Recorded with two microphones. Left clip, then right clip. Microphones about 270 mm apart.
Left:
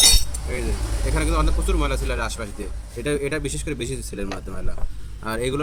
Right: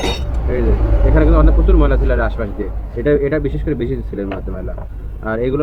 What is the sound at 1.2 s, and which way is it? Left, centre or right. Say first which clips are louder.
Speech: right 9 dB; left.